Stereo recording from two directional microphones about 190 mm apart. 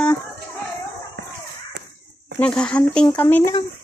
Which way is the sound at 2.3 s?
5° left (ahead or behind).